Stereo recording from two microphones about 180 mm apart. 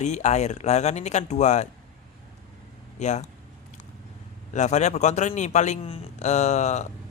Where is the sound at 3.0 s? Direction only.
40° left (ahead or behind).